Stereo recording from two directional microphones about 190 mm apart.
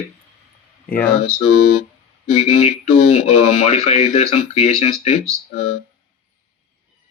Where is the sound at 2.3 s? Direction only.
35° left (ahead or behind).